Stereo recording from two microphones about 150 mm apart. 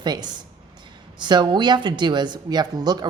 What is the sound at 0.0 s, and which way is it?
Speech, 25° right (ahead or behind).